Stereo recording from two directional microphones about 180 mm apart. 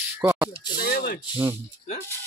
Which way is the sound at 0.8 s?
60° left (ahead or behind).